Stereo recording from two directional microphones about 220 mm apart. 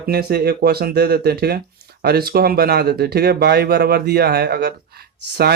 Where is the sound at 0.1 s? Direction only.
45° right (ahead or behind).